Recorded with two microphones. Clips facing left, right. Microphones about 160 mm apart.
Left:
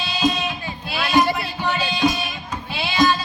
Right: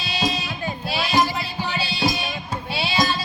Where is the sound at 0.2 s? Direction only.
35° right (ahead or behind).